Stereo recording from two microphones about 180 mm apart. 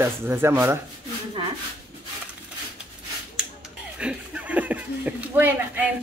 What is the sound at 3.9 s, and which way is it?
Speech, 5° right (ahead or behind).